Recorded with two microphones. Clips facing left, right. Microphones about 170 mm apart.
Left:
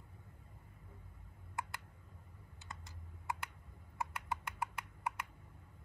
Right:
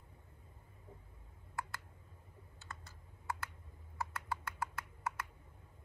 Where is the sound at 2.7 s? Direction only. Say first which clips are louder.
Even; 20° left (ahead or behind).